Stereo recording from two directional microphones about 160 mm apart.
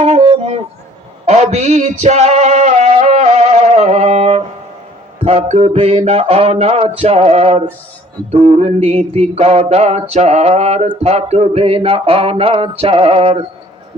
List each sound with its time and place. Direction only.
0.0 s music: 40° right (ahead or behind)
5.2 s mantra: 40° right (ahead or behind)